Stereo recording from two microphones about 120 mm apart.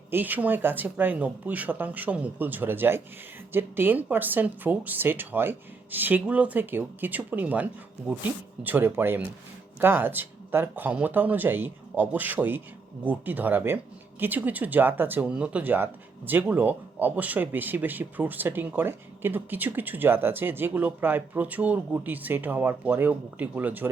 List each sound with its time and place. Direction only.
0.1 s speech: 15° right (ahead or behind)